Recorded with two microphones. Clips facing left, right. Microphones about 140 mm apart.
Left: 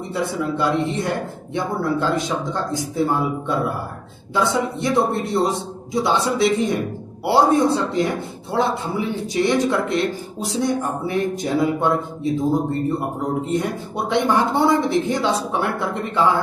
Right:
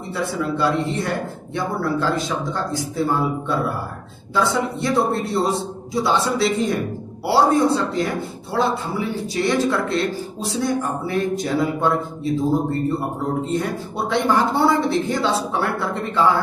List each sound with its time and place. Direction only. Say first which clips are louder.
0.1 s a man's voice: even; 20° left (ahead or behind)
13.5 s a man's voice: left 1 dB; 20° left (ahead or behind)